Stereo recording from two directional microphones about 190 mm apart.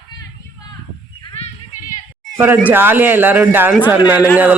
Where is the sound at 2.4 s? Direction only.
10° right (ahead or behind).